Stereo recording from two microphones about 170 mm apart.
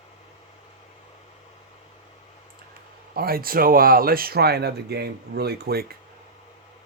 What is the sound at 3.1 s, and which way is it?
Speech, 60° right (ahead or behind).